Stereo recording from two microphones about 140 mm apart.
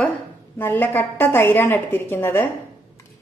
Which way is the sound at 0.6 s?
15° left (ahead or behind).